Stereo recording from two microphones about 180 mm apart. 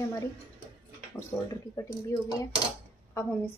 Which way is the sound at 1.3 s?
10° left (ahead or behind).